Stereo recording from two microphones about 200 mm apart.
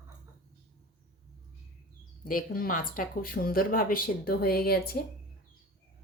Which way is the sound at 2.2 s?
45° left (ahead or behind).